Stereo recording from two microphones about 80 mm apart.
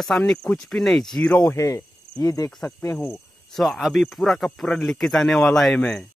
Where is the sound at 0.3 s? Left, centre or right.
Centre.